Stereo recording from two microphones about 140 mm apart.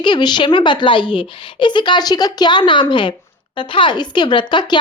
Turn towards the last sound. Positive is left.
turn(degrees=35)  # may be behind; listen again after turning